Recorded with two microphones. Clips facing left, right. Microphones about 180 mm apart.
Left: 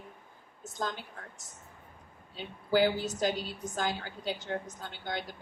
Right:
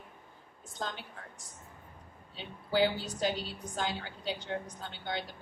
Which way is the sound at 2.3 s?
45° left (ahead or behind).